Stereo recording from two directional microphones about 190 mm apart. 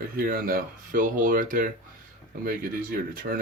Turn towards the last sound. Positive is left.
turn(degrees=-50)  # may be behind; listen again after turning